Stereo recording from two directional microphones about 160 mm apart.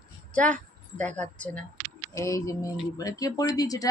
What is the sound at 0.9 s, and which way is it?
Speech, 10° left (ahead or behind).